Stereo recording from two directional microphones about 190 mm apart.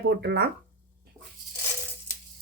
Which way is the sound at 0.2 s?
60° right (ahead or behind).